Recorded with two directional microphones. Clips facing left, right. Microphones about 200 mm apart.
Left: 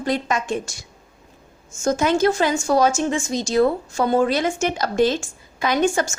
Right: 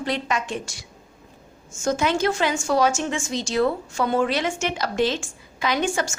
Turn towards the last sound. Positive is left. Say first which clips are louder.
# left 4 dB
turn(degrees=45)  # may be behind; listen again after turning